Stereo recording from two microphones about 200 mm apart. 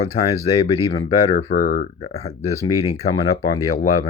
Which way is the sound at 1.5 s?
45° left (ahead or behind).